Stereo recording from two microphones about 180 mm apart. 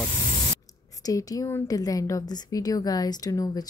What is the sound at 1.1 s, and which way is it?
A woman's voice, 20° left (ahead or behind).